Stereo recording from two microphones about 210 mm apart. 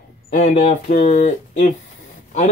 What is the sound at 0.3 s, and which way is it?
Speech, 35° left (ahead or behind).